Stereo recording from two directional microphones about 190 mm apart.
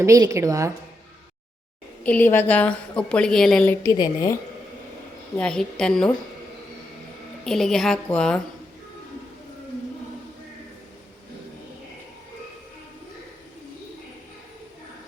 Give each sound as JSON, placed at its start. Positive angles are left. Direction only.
{"t": 0.0, "sound": "a woman's voice", "side_deg": -15}
{"t": 2.0, "sound": "a woman's voice", "side_deg": 10}
{"t": 3.8, "sound": "a woman's voice", "side_deg": 20}
{"t": 5.4, "sound": "a woman's voice", "side_deg": 5}
{"t": 7.4, "sound": "a woman's voice", "side_deg": 0}